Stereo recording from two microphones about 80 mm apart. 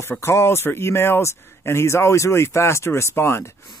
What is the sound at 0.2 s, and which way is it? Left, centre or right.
Speech, left.